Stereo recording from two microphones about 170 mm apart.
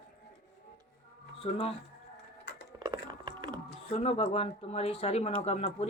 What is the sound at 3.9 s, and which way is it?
Speech, 35° left (ahead or behind).